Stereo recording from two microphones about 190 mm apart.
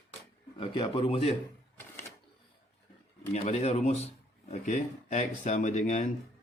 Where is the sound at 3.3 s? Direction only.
35° left (ahead or behind).